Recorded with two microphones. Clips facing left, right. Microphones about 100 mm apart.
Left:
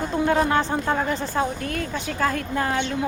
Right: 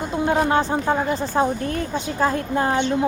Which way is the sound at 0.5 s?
15° right (ahead or behind).